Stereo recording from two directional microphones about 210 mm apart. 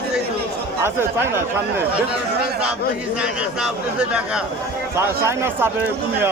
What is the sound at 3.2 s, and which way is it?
A man's voice, 5° right (ahead or behind).